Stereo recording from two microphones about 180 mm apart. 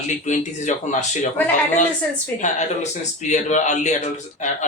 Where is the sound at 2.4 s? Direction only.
40° left (ahead or behind).